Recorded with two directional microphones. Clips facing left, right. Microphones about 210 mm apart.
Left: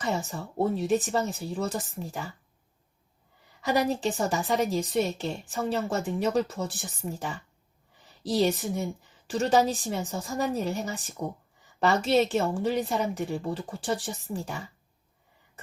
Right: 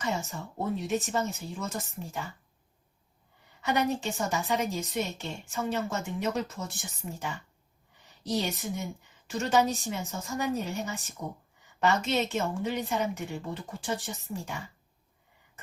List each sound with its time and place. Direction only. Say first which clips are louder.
0.0 s a woman's voice: left 3 dB; 35° left (ahead or behind)
3.6 s a woman's voice: left 3 dB; 35° left (ahead or behind)